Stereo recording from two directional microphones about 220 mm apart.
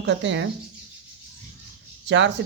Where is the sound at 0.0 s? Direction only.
55° right (ahead or behind).